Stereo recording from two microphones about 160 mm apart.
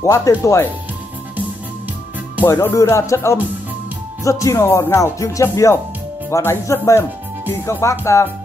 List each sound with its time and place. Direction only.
0.0 s speech: 20° left (ahead or behind)
2.4 s speech: 15° left (ahead or behind)